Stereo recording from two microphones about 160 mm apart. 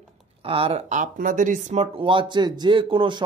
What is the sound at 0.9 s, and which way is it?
Speech, 55° right (ahead or behind).